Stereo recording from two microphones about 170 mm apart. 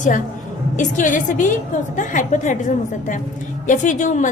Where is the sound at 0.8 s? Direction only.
50° left (ahead or behind).